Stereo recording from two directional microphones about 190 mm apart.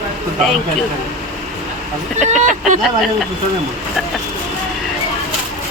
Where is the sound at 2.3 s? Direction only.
40° right (ahead or behind).